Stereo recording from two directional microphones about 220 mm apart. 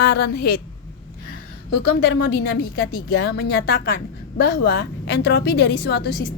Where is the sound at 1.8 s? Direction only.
50° left (ahead or behind).